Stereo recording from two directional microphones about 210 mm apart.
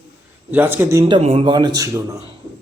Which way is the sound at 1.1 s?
30° right (ahead or behind).